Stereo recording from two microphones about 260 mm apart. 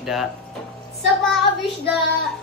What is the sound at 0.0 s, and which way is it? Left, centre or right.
Speech, centre.